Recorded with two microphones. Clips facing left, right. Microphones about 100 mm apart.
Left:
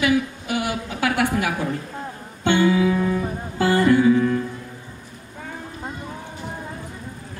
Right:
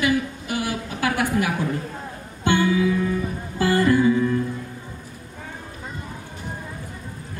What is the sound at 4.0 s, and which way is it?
Music, 55° left (ahead or behind).